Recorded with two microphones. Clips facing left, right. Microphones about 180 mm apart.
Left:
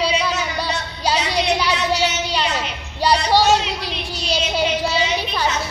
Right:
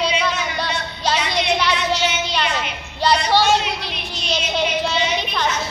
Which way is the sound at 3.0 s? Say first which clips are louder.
Left 1 dB; 10° left (ahead or behind).